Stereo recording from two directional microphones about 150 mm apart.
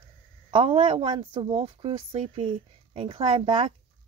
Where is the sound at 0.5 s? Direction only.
35° right (ahead or behind).